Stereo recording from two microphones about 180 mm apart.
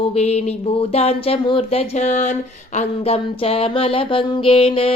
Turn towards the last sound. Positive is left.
turn(degrees=30)  # may be behind; listen again after turning